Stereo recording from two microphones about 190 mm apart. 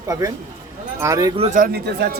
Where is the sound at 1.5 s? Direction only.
50° right (ahead or behind).